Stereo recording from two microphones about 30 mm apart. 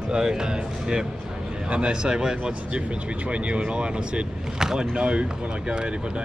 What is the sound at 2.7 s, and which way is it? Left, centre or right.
Speech, right.